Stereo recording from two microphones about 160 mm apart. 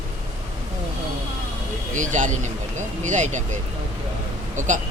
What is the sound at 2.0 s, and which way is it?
Speech, 50° right (ahead or behind).